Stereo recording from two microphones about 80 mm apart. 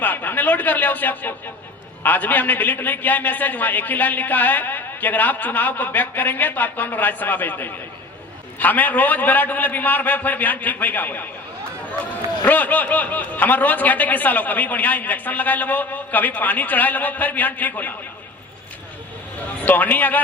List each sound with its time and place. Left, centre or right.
0.0 s a man's voice: left
12.5 s a man's voice: left
19.6 s a man's voice: left